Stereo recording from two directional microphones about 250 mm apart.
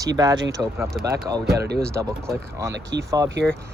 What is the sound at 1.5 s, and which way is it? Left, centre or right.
Speech, right.